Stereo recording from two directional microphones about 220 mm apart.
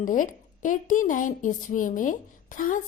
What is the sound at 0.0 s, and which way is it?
A woman's voice, 35° left (ahead or behind).